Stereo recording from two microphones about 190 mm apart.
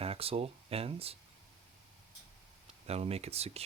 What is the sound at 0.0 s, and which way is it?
Speech, 30° right (ahead or behind).